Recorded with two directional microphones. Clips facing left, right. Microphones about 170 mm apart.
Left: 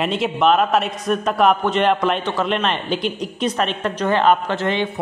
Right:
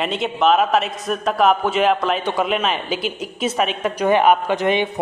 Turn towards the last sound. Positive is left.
turn(degrees=-15)  # may be behind; listen again after turning